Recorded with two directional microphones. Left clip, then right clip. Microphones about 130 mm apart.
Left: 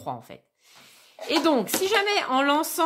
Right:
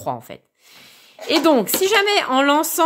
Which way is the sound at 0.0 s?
35° right (ahead or behind).